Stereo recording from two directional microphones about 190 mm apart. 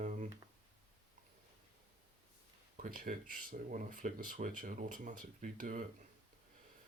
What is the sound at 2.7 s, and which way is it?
Speech, 45° right (ahead or behind).